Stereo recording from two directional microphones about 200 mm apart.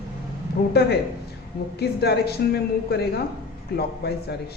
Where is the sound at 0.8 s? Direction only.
55° left (ahead or behind).